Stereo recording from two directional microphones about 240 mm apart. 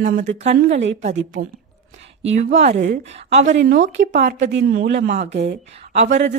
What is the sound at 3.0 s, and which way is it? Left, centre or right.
A woman's voice, right.